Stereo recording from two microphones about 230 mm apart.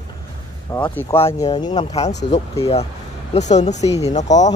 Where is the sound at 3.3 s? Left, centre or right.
Left.